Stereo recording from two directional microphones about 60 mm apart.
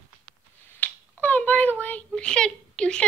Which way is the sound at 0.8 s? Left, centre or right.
Left.